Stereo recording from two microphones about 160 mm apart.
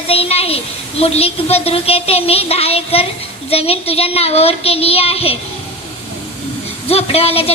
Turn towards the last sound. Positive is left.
turn(degrees=40)  # may be behind; listen again after turning